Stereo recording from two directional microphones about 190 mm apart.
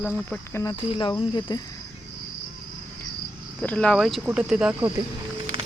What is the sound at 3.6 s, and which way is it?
Speech, 5° left (ahead or behind).